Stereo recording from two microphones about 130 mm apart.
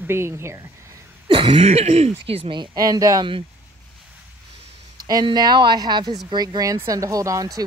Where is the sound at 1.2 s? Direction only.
40° right (ahead or behind).